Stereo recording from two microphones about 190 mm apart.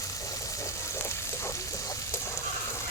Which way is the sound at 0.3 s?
15° left (ahead or behind).